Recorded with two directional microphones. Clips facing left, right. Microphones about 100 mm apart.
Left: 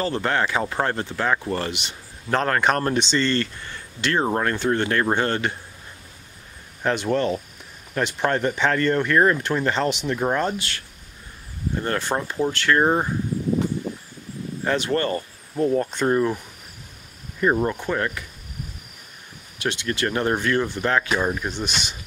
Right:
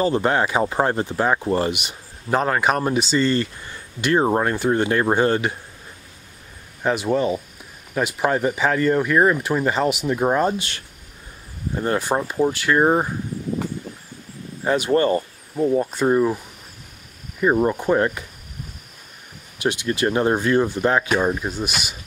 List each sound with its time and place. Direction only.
0.0 s speech: 15° right (ahead or behind)
6.8 s speech: 5° right (ahead or behind)
14.6 s speech: 15° right (ahead or behind)
17.4 s speech: 10° right (ahead or behind)
19.6 s speech: 15° right (ahead or behind)